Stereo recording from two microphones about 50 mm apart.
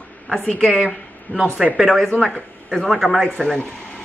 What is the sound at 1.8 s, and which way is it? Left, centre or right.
A woman's voice, centre.